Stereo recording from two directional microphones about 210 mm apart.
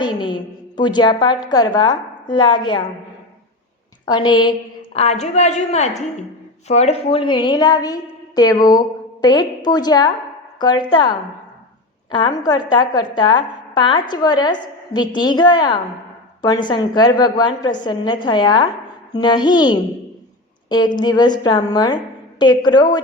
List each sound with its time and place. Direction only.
0.0 s a woman's voice: 20° left (ahead or behind)
4.0 s a woman's voice: 20° left (ahead or behind)
12.1 s a woman's voice: 20° left (ahead or behind)